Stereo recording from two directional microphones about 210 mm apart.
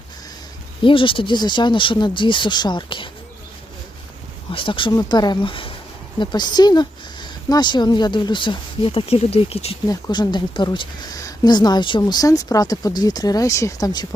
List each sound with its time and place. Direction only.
0.8 s speech: 25° left (ahead or behind)
4.5 s speech: 25° left (ahead or behind)